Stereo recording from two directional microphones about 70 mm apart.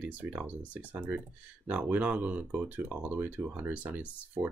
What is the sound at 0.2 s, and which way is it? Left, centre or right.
Speech, right.